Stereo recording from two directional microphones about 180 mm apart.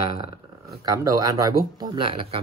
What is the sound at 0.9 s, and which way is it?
Speech, 20° right (ahead or behind).